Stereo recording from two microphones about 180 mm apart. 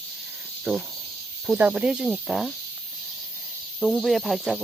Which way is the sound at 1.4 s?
10° right (ahead or behind).